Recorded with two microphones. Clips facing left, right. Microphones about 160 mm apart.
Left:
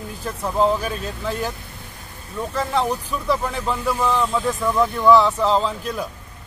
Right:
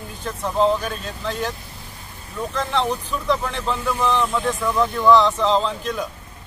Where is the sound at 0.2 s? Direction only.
5° left (ahead or behind).